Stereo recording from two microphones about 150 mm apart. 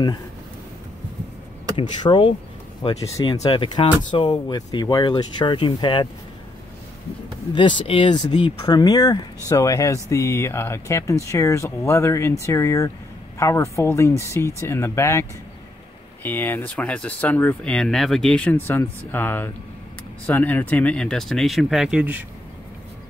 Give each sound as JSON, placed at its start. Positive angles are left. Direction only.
{"t": 1.8, "sound": "speech", "side_deg": 35}
{"t": 7.5, "sound": "speech", "side_deg": 35}